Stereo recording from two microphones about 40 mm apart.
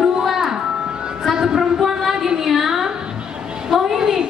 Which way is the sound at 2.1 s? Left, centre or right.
Centre.